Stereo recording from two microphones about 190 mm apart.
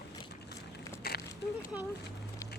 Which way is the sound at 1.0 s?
55° left (ahead or behind).